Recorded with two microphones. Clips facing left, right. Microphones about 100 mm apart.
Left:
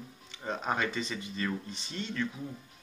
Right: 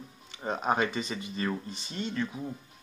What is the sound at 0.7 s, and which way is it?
Mantra, 35° right (ahead or behind).